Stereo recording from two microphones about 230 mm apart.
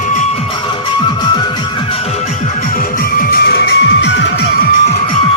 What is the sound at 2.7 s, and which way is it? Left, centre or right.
Music, left.